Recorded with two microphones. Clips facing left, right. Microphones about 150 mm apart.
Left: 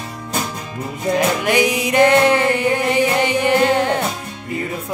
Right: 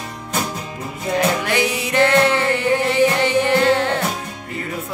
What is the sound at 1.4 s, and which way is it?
Music, 15° left (ahead or behind).